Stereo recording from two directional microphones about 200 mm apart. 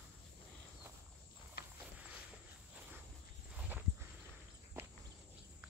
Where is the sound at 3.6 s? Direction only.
10° right (ahead or behind).